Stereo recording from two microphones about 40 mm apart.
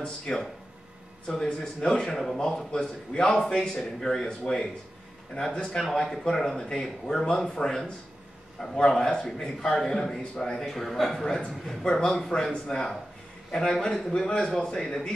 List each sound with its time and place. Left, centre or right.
0.3 s a man's voice: left
10.6 s a man's voice: centre